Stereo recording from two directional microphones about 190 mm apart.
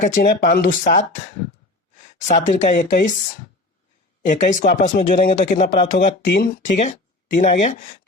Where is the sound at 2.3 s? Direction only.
40° left (ahead or behind).